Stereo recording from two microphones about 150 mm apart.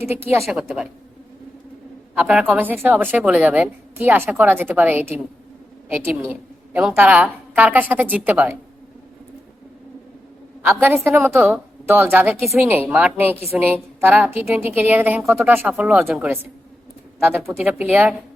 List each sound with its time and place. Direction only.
0.0 s a woman's voice: 15° right (ahead or behind)
0.4 s a woman's voice: centre (ahead or behind)
2.1 s a woman's voice: 5° right (ahead or behind)
10.6 s a woman's voice: 15° right (ahead or behind)